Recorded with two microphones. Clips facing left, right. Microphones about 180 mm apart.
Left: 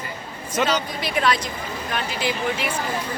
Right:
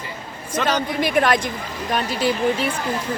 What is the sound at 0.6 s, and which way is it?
Speech, 50° right (ahead or behind).